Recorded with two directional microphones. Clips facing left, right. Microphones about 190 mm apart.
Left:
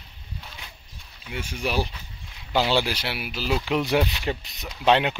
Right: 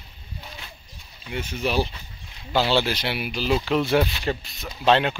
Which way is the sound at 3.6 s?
15° left (ahead or behind).